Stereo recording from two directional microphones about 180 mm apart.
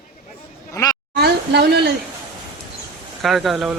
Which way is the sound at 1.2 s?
60° right (ahead or behind).